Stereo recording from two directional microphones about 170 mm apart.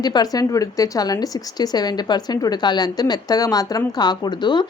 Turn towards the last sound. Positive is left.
turn(degrees=25)  # may be behind; listen again after turning